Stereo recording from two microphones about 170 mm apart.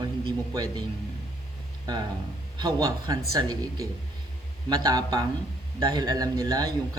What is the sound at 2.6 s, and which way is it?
A man's voice, 20° right (ahead or behind).